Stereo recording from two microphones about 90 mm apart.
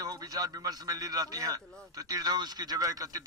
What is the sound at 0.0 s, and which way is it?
A man's voice, 45° right (ahead or behind).